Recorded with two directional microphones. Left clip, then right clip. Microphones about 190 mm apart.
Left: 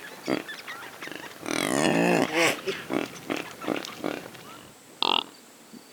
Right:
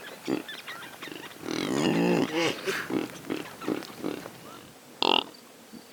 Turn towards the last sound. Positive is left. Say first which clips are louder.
# right 1 dB
turn(degrees=-50)  # may be behind; listen again after turning